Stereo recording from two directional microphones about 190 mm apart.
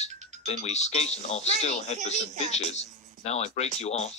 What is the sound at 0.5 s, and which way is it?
Speech, 35° left (ahead or behind).